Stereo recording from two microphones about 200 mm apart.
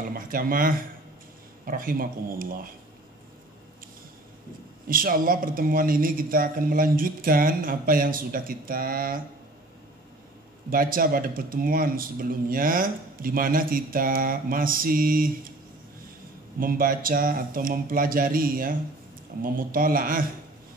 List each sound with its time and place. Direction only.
0.0 s speech: 45° right (ahead or behind)
4.8 s speech: 45° right (ahead or behind)
10.7 s speech: 45° right (ahead or behind)
16.5 s speech: 45° right (ahead or behind)